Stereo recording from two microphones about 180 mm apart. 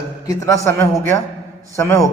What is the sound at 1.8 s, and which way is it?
Speech, 15° left (ahead or behind).